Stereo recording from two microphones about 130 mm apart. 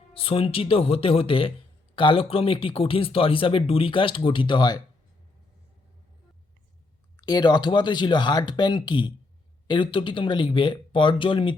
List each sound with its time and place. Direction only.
0.1 s speech: 45° left (ahead or behind)
7.2 s speech: 30° left (ahead or behind)